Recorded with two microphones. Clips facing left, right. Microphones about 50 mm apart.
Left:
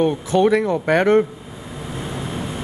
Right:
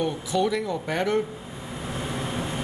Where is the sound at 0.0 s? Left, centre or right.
Left.